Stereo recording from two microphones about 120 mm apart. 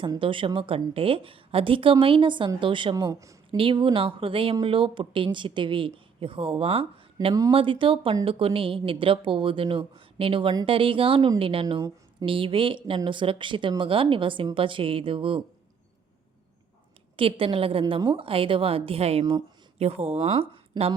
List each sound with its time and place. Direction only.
0.0 s speech: 45° right (ahead or behind)
2.9 s speech: 30° right (ahead or behind)
3.6 s speech: 45° right (ahead or behind)
17.2 s a woman's voice: 50° right (ahead or behind)